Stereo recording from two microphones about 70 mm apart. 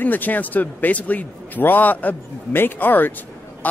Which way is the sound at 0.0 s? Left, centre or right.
Left.